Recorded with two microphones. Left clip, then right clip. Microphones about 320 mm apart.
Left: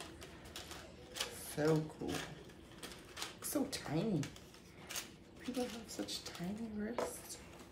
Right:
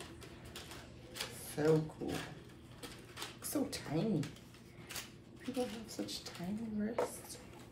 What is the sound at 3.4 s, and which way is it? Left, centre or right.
Speech, centre.